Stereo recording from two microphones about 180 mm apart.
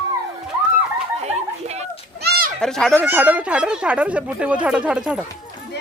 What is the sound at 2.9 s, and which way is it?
Speech, 10° right (ahead or behind).